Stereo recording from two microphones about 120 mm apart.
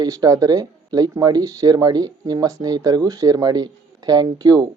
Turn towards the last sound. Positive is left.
turn(degrees=-35)  # may be behind; listen again after turning